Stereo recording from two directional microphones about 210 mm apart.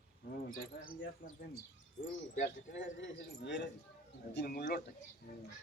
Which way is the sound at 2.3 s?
60° left (ahead or behind).